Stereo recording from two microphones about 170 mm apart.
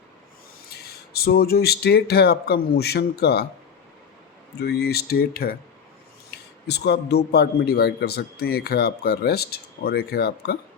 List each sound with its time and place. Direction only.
0.7 s a man's voice: 65° left (ahead or behind)
4.6 s a man's voice: 70° left (ahead or behind)
6.3 s a man's voice: 75° left (ahead or behind)